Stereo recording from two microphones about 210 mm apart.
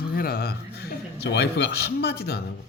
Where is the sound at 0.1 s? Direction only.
45° left (ahead or behind).